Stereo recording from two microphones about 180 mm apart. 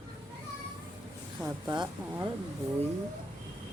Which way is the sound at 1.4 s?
20° right (ahead or behind).